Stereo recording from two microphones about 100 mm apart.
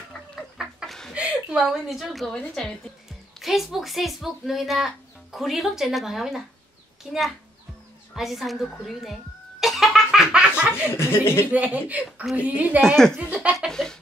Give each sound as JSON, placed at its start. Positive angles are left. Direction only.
{"t": 0.4, "sound": "gargling", "side_deg": 0}
{"t": 1.1, "sound": "speech", "side_deg": -10}
{"t": 8.1, "sound": "a sound", "side_deg": 0}
{"t": 10.9, "sound": "speech", "side_deg": 25}
{"t": 11.5, "sound": "speech", "side_deg": -15}
{"t": 12.8, "sound": "speech", "side_deg": 5}
{"t": 13.1, "sound": "speech", "side_deg": -15}
{"t": 13.7, "sound": "speech", "side_deg": 5}